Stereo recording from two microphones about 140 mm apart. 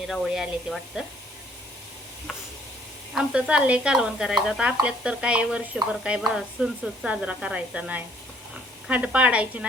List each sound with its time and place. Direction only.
0.1 s speech: centre (ahead or behind)
3.2 s stir: 5° right (ahead or behind)